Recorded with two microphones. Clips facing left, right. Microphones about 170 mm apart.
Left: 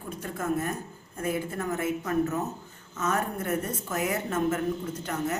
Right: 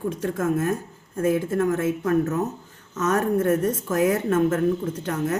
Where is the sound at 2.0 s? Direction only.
50° right (ahead or behind).